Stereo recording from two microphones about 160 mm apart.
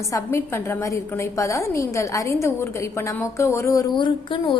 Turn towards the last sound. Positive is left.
turn(degrees=30)  # may be behind; listen again after turning